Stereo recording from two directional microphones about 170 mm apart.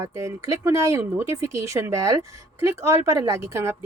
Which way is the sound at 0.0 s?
15° right (ahead or behind).